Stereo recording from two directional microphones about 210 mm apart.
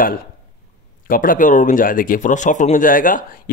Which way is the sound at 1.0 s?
40° left (ahead or behind).